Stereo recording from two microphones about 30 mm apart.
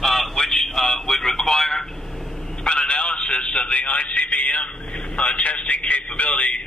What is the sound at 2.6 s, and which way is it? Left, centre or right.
Telephone, left.